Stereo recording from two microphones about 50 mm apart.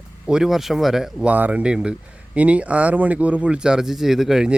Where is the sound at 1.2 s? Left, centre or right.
Right; by 4.4 s centre.